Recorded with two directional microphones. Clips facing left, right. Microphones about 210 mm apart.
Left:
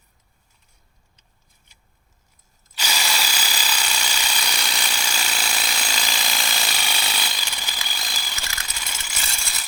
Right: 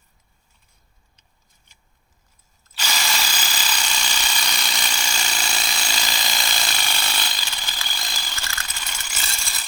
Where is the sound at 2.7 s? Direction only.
10° left (ahead or behind).